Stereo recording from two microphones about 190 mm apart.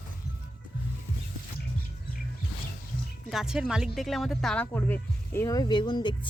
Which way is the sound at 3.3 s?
5° right (ahead or behind).